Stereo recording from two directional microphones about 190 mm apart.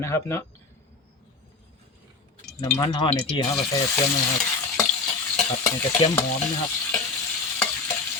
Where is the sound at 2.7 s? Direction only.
20° left (ahead or behind).